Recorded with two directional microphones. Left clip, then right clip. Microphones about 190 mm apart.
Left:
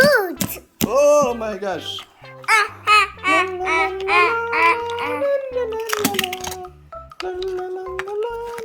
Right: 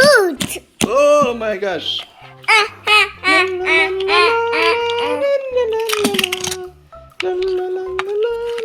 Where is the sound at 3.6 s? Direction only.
30° right (ahead or behind).